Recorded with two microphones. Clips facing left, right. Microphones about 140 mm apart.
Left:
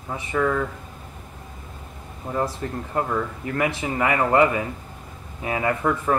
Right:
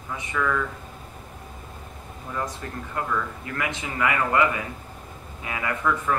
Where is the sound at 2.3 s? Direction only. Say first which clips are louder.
Left 6 dB; 35° left (ahead or behind).